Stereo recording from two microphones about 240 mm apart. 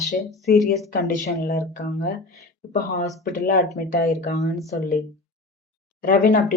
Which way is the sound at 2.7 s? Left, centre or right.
Left.